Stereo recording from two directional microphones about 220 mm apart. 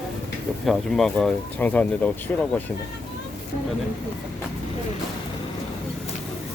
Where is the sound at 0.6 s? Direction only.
Centre (ahead or behind).